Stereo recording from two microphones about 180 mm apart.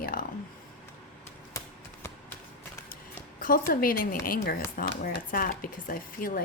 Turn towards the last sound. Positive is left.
turn(degrees=50)  # may be behind; listen again after turning